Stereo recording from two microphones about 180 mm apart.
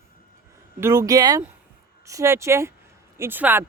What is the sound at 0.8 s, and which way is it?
Speech, 15° right (ahead or behind).